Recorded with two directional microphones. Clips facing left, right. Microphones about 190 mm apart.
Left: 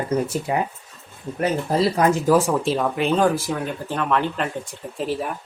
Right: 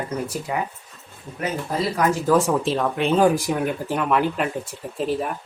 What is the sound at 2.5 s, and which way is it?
Speech, centre (ahead or behind).